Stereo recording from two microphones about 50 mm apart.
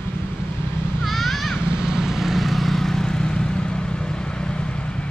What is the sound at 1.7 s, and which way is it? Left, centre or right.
Vehicle, centre.